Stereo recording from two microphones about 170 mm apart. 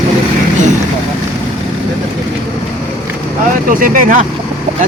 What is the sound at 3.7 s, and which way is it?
Speech, 55° right (ahead or behind).